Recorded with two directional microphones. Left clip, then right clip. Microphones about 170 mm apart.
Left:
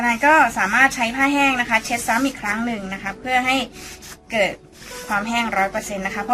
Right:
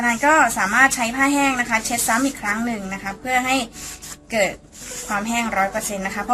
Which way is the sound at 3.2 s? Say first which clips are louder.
Left 1 dB; 20° right (ahead or behind).